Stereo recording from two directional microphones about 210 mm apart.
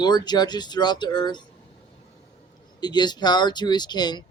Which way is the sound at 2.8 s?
20° left (ahead or behind).